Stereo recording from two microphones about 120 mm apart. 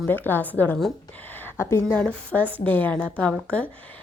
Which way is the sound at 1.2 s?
15° left (ahead or behind).